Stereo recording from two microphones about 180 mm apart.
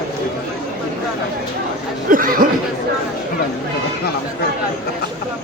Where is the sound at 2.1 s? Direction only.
50° right (ahead or behind).